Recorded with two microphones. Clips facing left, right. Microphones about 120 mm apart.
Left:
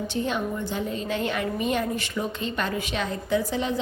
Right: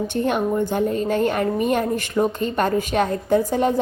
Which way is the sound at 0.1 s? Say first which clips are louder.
Right 7 dB; 55° right (ahead or behind).